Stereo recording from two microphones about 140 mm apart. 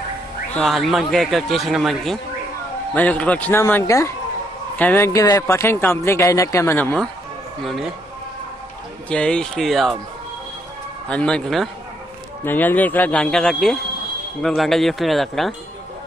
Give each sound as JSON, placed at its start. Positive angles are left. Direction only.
{"t": 0.6, "sound": "a man's voice", "side_deg": 0}
{"t": 2.9, "sound": "speech", "side_deg": 10}
{"t": 7.6, "sound": "a man's voice", "side_deg": 0}
{"t": 9.1, "sound": "a man's voice", "side_deg": 5}
{"t": 11.1, "sound": "a man's voice", "side_deg": 5}